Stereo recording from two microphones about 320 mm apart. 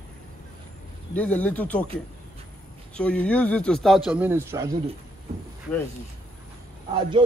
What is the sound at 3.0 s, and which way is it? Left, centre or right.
Speech, centre.